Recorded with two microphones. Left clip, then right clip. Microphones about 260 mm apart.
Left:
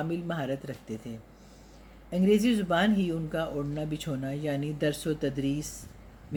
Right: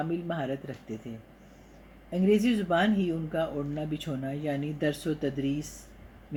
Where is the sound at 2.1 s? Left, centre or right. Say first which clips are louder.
Even; left.